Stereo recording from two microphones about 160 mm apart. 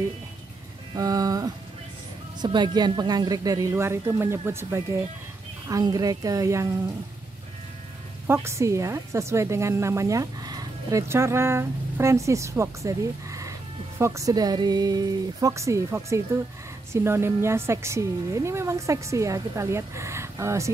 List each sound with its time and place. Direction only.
0.9 s a woman's voice: 25° right (ahead or behind)
8.3 s a woman's voice: 15° right (ahead or behind)